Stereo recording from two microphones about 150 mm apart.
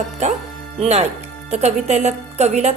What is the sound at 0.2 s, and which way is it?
Speech, 50° right (ahead or behind).